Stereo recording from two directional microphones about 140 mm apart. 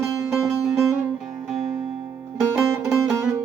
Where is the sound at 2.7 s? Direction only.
20° right (ahead or behind).